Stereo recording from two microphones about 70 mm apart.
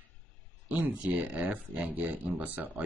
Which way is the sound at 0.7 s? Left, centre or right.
Centre.